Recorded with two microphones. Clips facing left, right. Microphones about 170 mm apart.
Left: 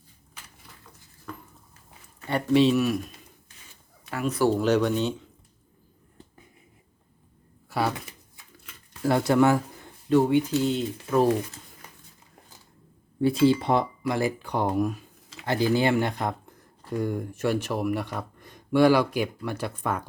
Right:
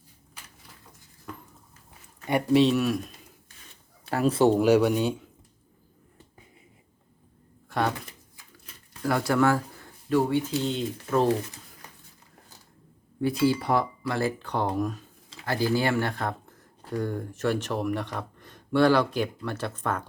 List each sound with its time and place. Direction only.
2.5 s speech: centre (ahead or behind)
4.0 s speech: 30° right (ahead or behind); by 5.2 s 10° right (ahead or behind)
7.7 s speech: 5° left (ahead or behind)
9.0 s speech: 25° left (ahead or behind)
10.6 s speech: 5° left (ahead or behind)
13.2 s speech: 25° left (ahead or behind)